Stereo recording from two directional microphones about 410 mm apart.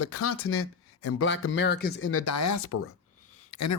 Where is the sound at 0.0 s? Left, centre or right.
Left.